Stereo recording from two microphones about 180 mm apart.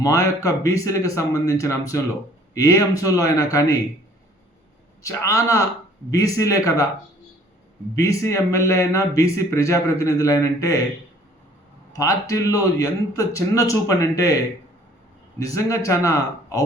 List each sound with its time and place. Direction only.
0.0 s a man's voice: 15° left (ahead or behind)
5.0 s a man's voice: 15° left (ahead or behind)
7.9 s a man's voice: 15° left (ahead or behind)
11.9 s a man's voice: 20° left (ahead or behind)